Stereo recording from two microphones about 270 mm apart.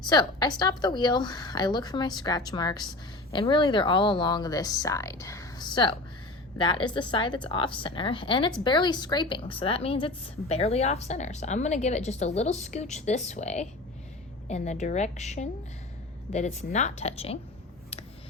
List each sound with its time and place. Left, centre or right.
0.1 s a woman's voice: centre